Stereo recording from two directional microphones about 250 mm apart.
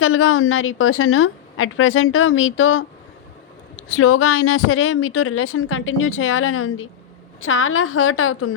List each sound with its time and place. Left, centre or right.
0.0 s a woman's voice: left